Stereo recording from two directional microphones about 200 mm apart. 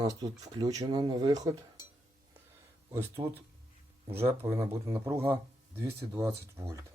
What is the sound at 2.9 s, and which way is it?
Speech, 10° right (ahead or behind).